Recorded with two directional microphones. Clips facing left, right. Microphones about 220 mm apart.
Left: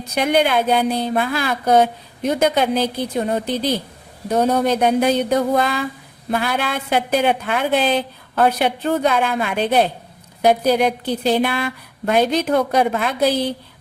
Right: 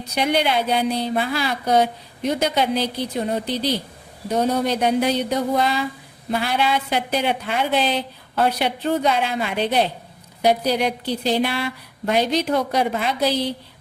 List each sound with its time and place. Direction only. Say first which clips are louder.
0.1 s a woman's voice: left 3 dB; 50° left (ahead or behind)